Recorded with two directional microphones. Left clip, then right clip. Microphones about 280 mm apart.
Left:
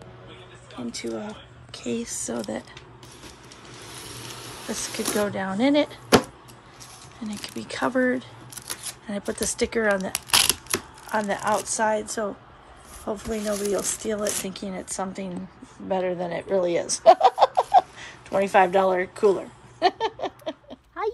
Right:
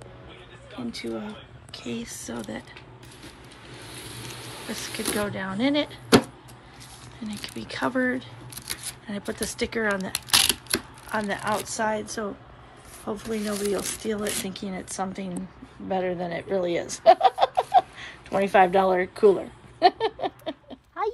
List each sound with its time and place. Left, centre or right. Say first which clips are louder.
0.7 s speech: left 1 dB; centre
4.6 s speech: left 2 dB; centre
7.2 s speech: left 1 dB; centre
9.3 s speech: left 3 dB; centre
16.9 s a sound: left 2 dB; centre
21.0 s a sound: even; centre